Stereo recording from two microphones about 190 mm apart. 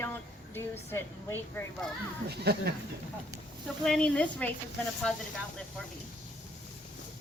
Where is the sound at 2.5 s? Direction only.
60° right (ahead or behind).